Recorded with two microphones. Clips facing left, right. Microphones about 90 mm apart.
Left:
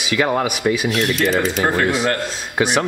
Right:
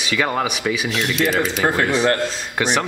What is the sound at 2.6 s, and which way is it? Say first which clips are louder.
Speech: left 2 dB; 15° left (ahead or behind).